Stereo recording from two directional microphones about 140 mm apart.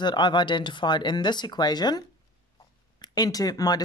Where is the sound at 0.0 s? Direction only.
30° left (ahead or behind).